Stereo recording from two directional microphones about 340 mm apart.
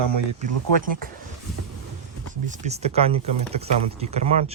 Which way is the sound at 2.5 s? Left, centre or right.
Centre.